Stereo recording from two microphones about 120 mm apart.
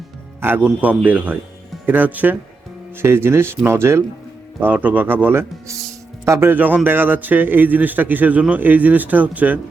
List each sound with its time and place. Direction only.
0.4 s speech: 15° right (ahead or behind)